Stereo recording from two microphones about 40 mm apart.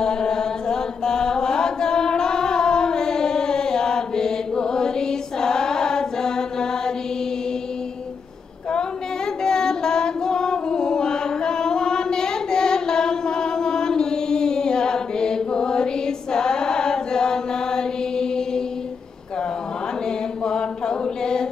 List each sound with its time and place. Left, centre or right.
0.0 s chant: centre
9.4 s female singing: centre
20.4 s chant: centre